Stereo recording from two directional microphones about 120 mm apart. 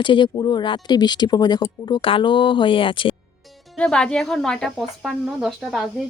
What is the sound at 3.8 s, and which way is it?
Speech, 5° left (ahead or behind).